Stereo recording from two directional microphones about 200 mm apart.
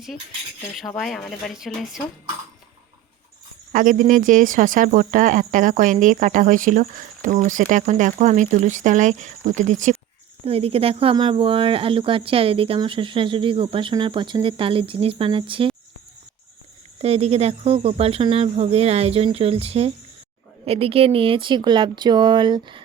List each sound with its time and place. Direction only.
0.8 s speech: centre (ahead or behind)
3.7 s speech: 40° right (ahead or behind); by 15.7 s 25° right (ahead or behind)
17.0 s speech: 30° right (ahead or behind)